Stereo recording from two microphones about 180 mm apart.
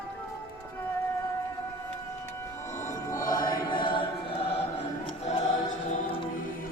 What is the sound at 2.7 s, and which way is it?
Choir, 15° left (ahead or behind).